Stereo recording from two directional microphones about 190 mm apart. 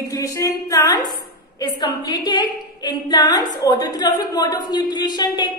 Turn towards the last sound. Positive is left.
turn(degrees=25)  # may be behind; listen again after turning